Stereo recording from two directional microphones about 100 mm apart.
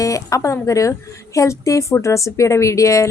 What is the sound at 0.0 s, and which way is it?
Speech, 35° left (ahead or behind).